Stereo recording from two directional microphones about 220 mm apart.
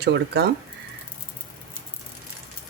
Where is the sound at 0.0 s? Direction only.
45° right (ahead or behind).